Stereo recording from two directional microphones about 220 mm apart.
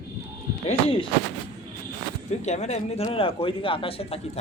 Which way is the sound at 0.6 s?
25° left (ahead or behind).